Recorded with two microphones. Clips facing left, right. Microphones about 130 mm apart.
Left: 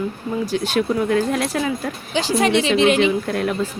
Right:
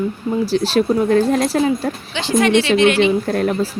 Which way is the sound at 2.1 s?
35° left (ahead or behind).